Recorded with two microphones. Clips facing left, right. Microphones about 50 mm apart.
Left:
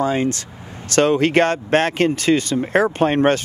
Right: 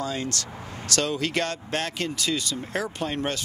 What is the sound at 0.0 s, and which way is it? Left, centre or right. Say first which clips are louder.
A man's voice: left 10 dB; left.